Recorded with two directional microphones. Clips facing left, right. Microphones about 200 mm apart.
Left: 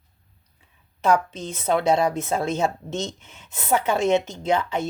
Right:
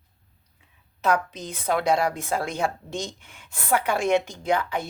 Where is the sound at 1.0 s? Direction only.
30° left (ahead or behind).